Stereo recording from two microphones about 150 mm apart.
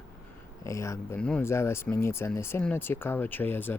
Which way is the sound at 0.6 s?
20° left (ahead or behind).